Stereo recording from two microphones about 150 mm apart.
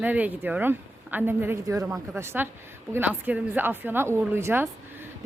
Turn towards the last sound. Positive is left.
turn(degrees=-15)  # may be behind; listen again after turning